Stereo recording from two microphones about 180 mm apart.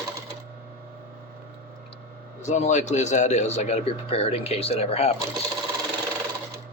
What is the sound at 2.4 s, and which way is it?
Speech, 40° left (ahead or behind).